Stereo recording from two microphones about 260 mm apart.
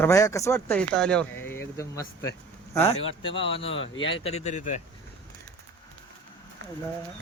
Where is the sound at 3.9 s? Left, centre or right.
Left.